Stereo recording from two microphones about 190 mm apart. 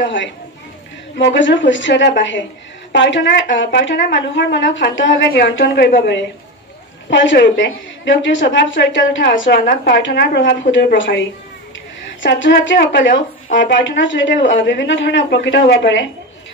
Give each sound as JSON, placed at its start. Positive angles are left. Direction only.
{"t": 0.0, "sound": "a woman's voice", "side_deg": 75}